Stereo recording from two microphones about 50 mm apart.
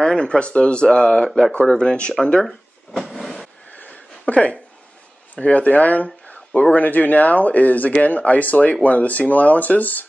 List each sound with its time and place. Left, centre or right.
0.0 s speech: centre
3.0 s vehicle: centre
3.7 s a sound: left
5.3 s speech: left
6.2 s a sound: left
6.7 s speech: left